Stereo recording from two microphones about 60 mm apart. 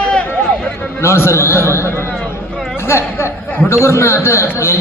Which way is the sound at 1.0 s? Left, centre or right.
Left.